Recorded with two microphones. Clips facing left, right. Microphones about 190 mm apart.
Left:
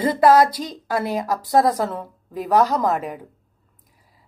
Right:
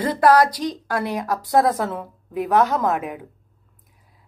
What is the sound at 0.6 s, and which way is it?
A woman's voice, 5° left (ahead or behind).